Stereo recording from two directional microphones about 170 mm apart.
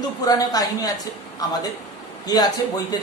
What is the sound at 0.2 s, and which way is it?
Speech, 20° left (ahead or behind).